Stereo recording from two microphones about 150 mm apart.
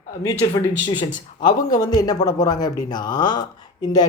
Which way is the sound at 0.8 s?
30° left (ahead or behind).